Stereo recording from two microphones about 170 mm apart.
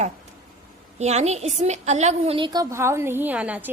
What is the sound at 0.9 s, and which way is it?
A woman's voice, 40° right (ahead or behind).